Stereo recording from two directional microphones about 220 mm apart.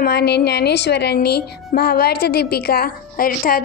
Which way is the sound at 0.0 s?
50° left (ahead or behind).